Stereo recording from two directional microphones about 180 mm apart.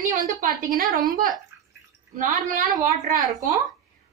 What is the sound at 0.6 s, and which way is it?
A woman's voice, 50° right (ahead or behind).